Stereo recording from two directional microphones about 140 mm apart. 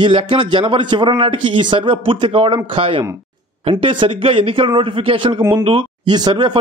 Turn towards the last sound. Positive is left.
turn(degrees=-30)  # may be behind; listen again after turning